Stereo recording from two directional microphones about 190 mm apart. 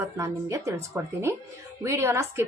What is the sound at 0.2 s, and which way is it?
A woman's voice, 15° right (ahead or behind).